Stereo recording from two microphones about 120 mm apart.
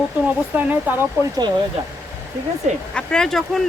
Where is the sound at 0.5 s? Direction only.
15° right (ahead or behind).